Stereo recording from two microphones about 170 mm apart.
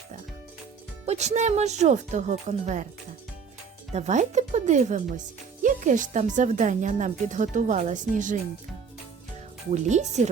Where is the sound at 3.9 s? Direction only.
45° right (ahead or behind).